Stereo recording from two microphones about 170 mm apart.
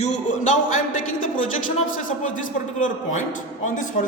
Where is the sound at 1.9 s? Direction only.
50° left (ahead or behind).